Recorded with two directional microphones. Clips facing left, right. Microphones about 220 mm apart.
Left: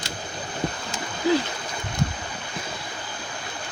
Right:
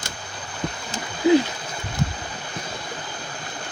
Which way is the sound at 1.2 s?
20° right (ahead or behind).